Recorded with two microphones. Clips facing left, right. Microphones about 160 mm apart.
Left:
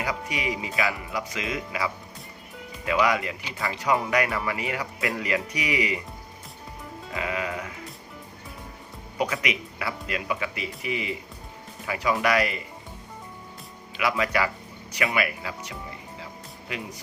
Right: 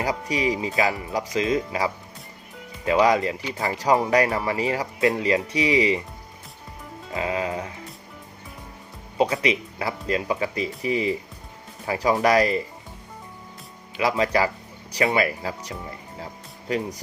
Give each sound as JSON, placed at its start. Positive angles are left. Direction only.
{"t": 0.0, "sound": "speech", "side_deg": -35}
{"t": 7.1, "sound": "music", "side_deg": -30}
{"t": 9.1, "sound": "speech", "side_deg": -30}
{"t": 13.9, "sound": "speech", "side_deg": -30}
{"t": 16.2, "sound": "music", "side_deg": -35}